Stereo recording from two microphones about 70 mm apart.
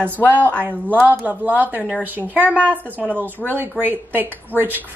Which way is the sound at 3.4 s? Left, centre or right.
Centre.